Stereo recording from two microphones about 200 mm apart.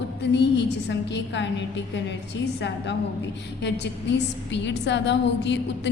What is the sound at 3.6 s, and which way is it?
A woman's voice, 60° left (ahead or behind).